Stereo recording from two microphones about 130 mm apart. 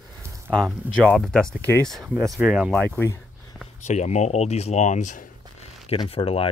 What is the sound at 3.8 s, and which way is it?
Speech, 60° left (ahead or behind).